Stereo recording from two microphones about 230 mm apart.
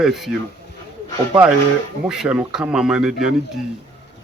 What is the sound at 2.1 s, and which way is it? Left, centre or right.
A man's voice, centre.